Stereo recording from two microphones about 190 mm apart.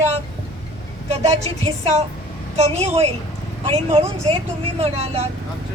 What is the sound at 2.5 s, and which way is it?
Speech, 35° right (ahead or behind).